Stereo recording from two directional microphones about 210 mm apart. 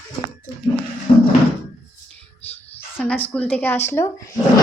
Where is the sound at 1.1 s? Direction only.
25° left (ahead or behind).